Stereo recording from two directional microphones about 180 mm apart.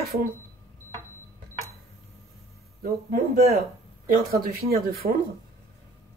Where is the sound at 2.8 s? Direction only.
55° right (ahead or behind).